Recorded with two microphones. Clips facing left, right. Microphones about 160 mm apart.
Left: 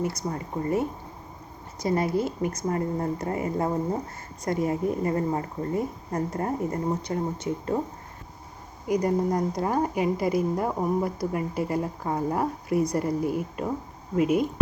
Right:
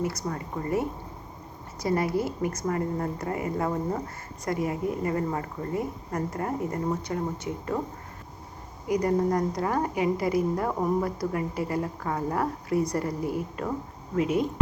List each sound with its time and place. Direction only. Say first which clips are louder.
0.0 s speech: left 1 dB; 20° left (ahead or behind)
8.9 s speech: even; 20° left (ahead or behind)